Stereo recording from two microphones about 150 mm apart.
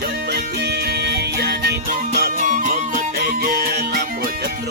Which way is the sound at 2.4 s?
60° right (ahead or behind).